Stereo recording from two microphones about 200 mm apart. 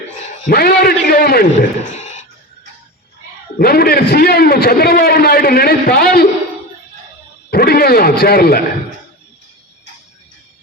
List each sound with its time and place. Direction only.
0.4 s a man's voice: 50° left (ahead or behind)
1.9 s a sound: 35° left (ahead or behind)
3.6 s a man's voice: 50° left (ahead or behind)
7.5 s a man's voice: 50° left (ahead or behind)